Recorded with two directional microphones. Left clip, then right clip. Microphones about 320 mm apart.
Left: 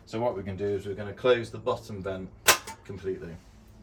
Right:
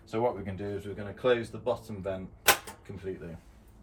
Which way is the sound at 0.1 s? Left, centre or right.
Centre.